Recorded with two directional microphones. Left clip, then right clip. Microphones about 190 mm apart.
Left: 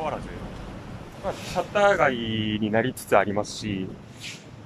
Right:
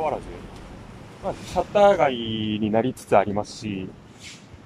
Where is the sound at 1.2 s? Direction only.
15° right (ahead or behind).